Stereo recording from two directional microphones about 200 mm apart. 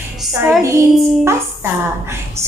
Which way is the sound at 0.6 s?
15° right (ahead or behind).